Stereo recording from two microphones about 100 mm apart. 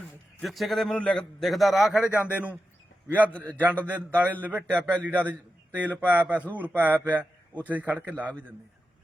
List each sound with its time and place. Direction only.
0.4 s a man's voice: centre (ahead or behind)
3.6 s a man's voice: 20° right (ahead or behind)